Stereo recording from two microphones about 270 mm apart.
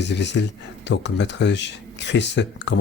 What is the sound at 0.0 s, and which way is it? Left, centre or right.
Speech, left.